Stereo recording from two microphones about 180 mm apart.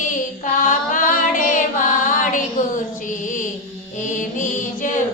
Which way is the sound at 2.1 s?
45° left (ahead or behind).